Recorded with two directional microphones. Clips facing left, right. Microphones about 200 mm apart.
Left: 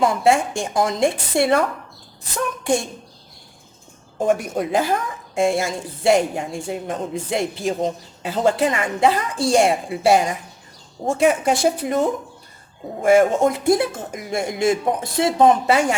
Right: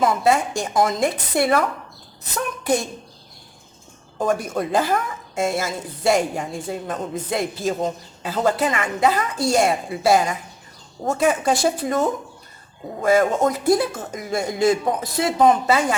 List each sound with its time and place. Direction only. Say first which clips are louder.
0.0 s a woman's voice: left 1 dB; 30° left (ahead or behind)
4.2 s a woman's voice: left 2 dB; 25° left (ahead or behind)